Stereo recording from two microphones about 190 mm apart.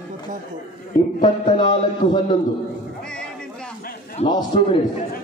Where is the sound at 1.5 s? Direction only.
25° left (ahead or behind).